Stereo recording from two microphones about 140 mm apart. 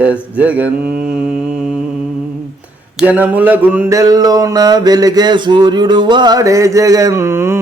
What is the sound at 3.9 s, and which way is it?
Mantra, 25° right (ahead or behind).